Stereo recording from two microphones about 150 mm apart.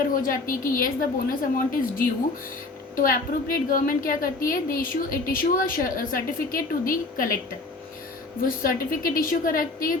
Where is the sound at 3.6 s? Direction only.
70° left (ahead or behind).